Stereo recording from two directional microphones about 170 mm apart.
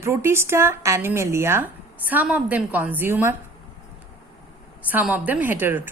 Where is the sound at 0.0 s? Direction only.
15° right (ahead or behind).